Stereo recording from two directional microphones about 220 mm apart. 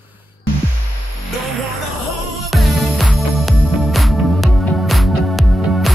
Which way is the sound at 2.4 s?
Centre (ahead or behind).